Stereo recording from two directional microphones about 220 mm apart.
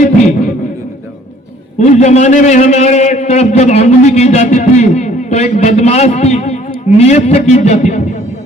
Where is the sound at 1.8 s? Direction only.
30° left (ahead or behind).